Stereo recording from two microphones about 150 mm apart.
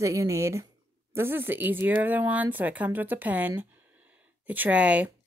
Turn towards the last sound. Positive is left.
turn(degrees=-10)  # may be behind; listen again after turning